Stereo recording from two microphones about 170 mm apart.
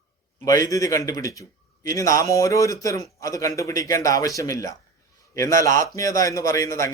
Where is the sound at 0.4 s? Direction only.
20° left (ahead or behind).